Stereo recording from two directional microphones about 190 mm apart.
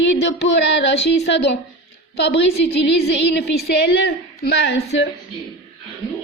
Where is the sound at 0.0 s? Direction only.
70° left (ahead or behind).